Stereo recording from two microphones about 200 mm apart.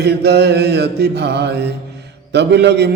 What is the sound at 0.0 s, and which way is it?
A man's voice, 55° right (ahead or behind).